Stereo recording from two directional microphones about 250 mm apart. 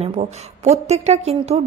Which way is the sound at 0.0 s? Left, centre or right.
Right.